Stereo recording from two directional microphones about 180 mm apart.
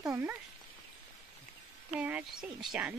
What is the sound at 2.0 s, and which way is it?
Speech, 10° right (ahead or behind).